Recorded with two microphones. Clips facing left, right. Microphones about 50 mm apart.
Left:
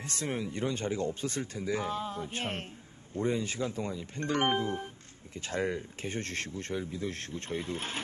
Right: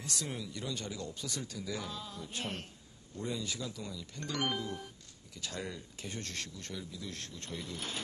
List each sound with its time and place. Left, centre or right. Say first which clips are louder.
0.0 s speech: left 6 dB; left